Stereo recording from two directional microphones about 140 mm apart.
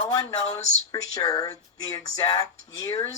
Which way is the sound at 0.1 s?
25° left (ahead or behind).